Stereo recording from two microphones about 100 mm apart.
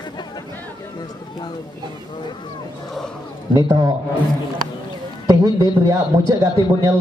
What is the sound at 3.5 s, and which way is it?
Speech, 45° right (ahead or behind).